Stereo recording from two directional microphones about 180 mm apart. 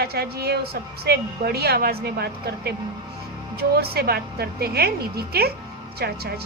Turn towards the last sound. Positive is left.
turn(degrees=-60)  # may be behind; listen again after turning